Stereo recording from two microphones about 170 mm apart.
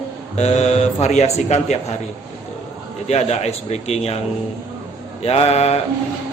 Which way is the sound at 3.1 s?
40° left (ahead or behind).